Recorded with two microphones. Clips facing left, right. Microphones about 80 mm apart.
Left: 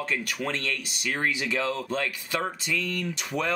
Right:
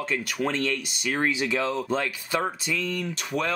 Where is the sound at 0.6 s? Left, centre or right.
Centre.